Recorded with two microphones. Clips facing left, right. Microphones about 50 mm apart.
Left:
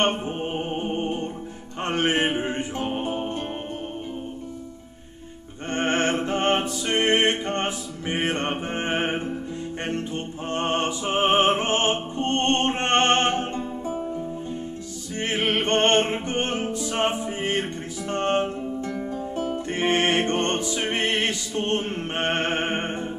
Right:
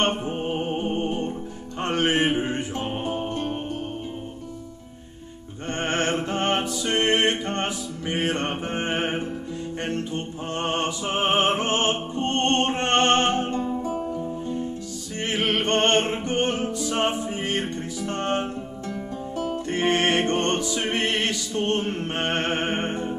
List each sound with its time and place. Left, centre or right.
0.0 s music: left
1.8 s mantra: left
3.0 s music: left
5.7 s music: left
17.4 s music: left
19.7 s music: left